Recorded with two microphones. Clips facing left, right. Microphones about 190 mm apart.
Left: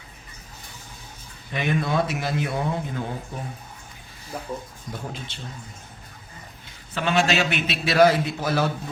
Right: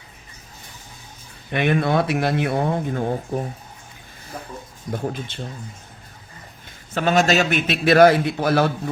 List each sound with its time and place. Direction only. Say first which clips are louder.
1.5 s speech: right 4 dB; 65° right (ahead or behind)
4.9 s a man's voice: right 8 dB; 50° right (ahead or behind)
6.9 s a man's voice: right 4 dB; 45° right (ahead or behind); by 8.7 s 65° right (ahead or behind)